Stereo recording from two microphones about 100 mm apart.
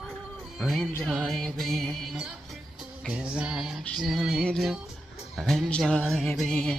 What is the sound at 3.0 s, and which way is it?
Music, 10° right (ahead or behind).